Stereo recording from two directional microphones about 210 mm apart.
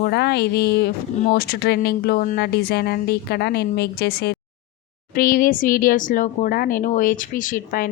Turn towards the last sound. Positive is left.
turn(degrees=40)  # may be behind; listen again after turning